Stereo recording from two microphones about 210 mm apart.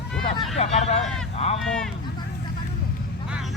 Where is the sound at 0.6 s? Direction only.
30° left (ahead or behind).